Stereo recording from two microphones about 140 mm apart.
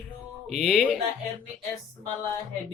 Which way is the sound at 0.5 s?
5° right (ahead or behind).